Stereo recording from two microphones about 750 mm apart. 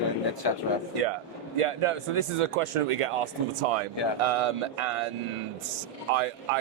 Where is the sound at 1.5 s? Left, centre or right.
Right.